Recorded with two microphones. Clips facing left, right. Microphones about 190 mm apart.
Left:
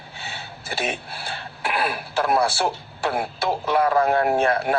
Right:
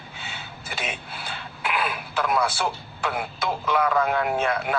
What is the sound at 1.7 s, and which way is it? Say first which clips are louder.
Speech: left 3 dB; 35° left (ahead or behind).